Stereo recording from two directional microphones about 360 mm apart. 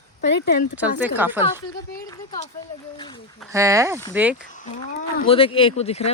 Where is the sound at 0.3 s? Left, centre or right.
Left.